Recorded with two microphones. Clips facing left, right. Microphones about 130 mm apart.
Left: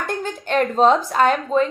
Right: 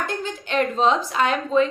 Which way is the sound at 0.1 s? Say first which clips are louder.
Left 4 dB; 50° left (ahead or behind).